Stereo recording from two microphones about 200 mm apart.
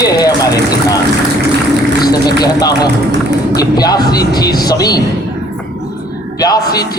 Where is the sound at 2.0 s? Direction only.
20° left (ahead or behind).